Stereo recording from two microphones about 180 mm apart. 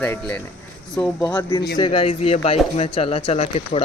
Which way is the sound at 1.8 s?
30° left (ahead or behind).